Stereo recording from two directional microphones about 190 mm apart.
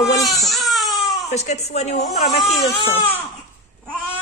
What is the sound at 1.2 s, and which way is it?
A woman's voice, 35° left (ahead or behind).